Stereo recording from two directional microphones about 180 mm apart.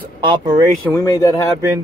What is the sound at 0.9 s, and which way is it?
Speech, 15° left (ahead or behind).